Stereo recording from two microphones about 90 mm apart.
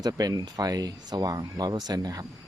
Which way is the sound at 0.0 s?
45° right (ahead or behind).